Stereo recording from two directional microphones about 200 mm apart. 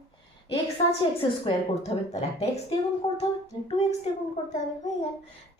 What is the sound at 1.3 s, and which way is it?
Speech, 25° left (ahead or behind).